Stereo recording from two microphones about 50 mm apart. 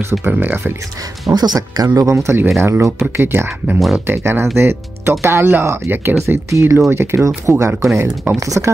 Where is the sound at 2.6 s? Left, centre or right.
Right.